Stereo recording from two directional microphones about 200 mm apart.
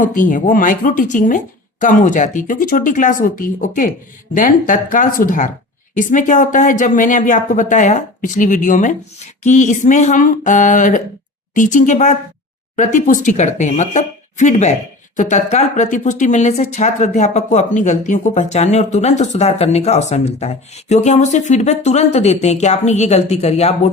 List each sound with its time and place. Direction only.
0.0 s speech: 40° left (ahead or behind)